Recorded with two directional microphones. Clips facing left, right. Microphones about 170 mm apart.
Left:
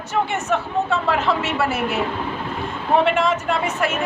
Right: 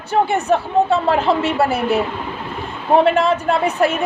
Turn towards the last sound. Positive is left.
turn(degrees=-35)  # may be behind; listen again after turning